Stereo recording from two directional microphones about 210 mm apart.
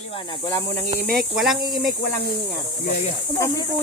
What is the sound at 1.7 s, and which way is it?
Speech, centre (ahead or behind).